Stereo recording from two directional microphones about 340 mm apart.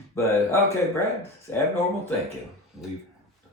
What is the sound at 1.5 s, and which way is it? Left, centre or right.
Speech, centre.